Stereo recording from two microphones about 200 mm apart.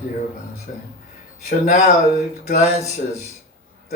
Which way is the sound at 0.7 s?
40° left (ahead or behind).